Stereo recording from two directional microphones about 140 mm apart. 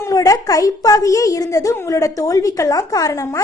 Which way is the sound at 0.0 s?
25° left (ahead or behind).